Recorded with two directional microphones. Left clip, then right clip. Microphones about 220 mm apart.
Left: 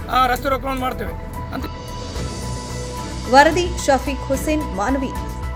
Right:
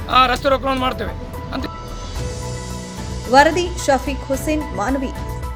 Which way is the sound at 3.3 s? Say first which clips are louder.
Even; centre (ahead or behind).